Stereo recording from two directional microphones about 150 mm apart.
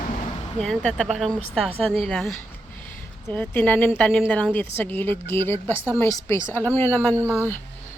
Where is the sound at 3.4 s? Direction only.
10° left (ahead or behind).